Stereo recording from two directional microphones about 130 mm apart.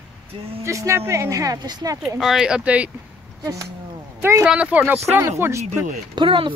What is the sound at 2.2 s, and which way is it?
Speech, 5° right (ahead or behind).